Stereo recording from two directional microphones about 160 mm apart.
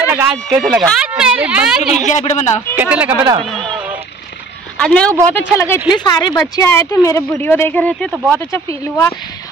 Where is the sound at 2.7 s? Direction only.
10° right (ahead or behind).